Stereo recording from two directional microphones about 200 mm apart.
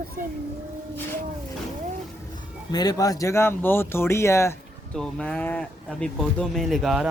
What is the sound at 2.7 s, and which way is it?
Speech, 20° left (ahead or behind).